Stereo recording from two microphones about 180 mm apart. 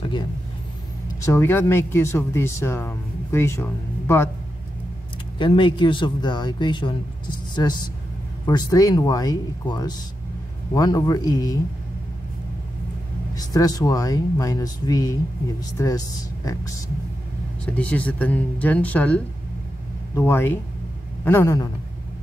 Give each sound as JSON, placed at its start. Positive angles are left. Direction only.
{"t": 1.2, "sound": "speech", "side_deg": 15}
{"t": 5.4, "sound": "speech", "side_deg": 25}
{"t": 13.3, "sound": "speech", "side_deg": 20}
{"t": 17.7, "sound": "speech", "side_deg": 5}